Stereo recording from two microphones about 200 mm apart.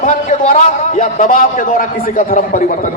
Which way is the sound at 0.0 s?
40° left (ahead or behind).